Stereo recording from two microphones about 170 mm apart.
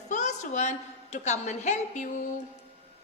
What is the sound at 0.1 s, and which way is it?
A woman's voice, 45° left (ahead or behind).